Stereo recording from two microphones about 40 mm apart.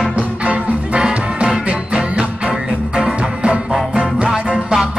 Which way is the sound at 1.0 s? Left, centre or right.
Centre.